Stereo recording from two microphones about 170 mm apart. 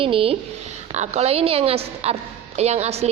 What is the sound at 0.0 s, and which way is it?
A woman's voice, 35° right (ahead or behind).